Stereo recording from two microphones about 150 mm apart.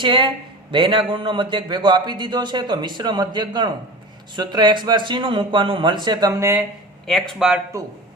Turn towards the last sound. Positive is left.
turn(degrees=-5)  # may be behind; listen again after turning